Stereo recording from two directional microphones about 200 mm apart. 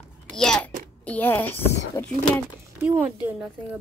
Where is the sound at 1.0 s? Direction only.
10° left (ahead or behind).